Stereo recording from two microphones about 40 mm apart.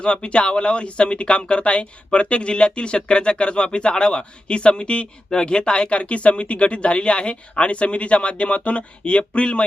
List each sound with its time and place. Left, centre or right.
0.0 s speech: left